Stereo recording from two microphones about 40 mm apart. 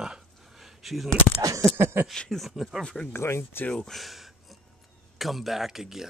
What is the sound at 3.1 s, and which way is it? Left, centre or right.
Speech, left.